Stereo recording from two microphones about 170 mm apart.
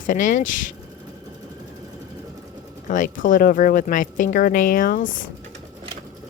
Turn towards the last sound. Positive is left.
turn(degrees=55)  # may be behind; listen again after turning